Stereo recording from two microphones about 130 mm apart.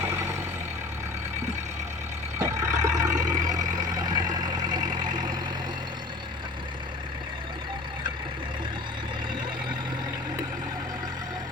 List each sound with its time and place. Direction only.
0.0 s vehicle: 20° right (ahead or behind)
2.4 s vehicle: 25° right (ahead or behind)
4.9 s vehicle: 80° right